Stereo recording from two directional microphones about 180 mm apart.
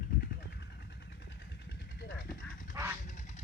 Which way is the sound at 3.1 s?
40° left (ahead or behind).